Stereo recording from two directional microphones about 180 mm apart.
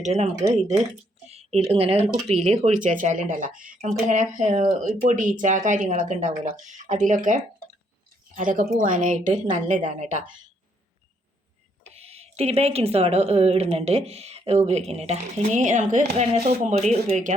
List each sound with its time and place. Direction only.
0.0 s speech: 35° right (ahead or behind)
1.3 s speech: 35° right (ahead or behind)
11.8 s speech: 35° right (ahead or behind)